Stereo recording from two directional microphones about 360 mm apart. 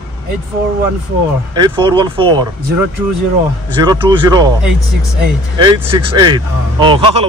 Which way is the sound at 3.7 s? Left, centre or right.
Centre.